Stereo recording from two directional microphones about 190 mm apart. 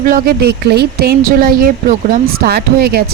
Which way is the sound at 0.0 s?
50° right (ahead or behind).